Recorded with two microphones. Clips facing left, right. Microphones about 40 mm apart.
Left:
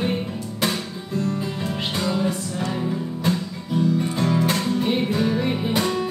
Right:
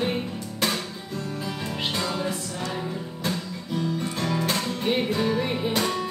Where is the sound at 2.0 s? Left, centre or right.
Centre.